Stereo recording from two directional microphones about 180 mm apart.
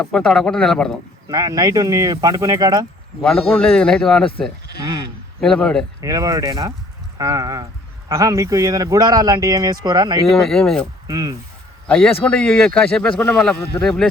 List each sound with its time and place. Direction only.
0.0 s speech: 5° left (ahead or behind)
1.3 s speech: 20° right (ahead or behind)
3.2 s speech: centre (ahead or behind)
4.8 s speech: 20° right (ahead or behind)
5.4 s speech: 5° left (ahead or behind)
6.0 s speech: 20° right (ahead or behind)
10.2 s speech: centre (ahead or behind)
11.0 s speech: 20° right (ahead or behind)
11.9 s speech: 5° left (ahead or behind)